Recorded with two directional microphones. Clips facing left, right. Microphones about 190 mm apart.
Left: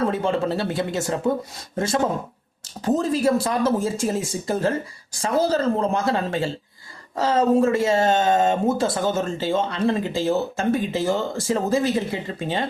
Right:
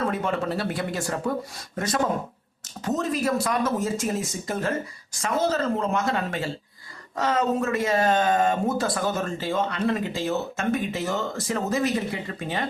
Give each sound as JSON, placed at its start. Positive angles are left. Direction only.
{"t": 0.0, "sound": "speech", "side_deg": 30}